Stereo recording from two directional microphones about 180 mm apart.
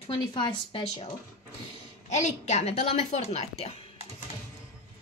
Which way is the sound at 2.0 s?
40° left (ahead or behind).